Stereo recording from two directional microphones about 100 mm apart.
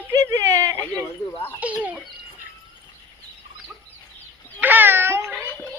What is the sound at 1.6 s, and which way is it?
Speech, 15° right (ahead or behind).